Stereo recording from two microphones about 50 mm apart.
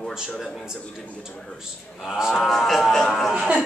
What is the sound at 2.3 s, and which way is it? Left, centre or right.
Speech, centre.